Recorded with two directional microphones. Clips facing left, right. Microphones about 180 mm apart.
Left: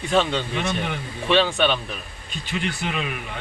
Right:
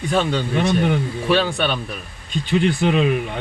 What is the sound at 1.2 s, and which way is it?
Speech, 5° right (ahead or behind).